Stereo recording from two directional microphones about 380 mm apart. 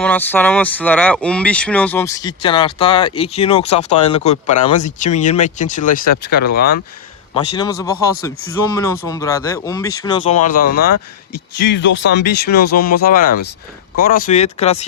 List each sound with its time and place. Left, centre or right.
0.0 s speech: centre; by 6.7 s left
7.3 s speech: centre
10.8 s speech: left
11.7 s speech: left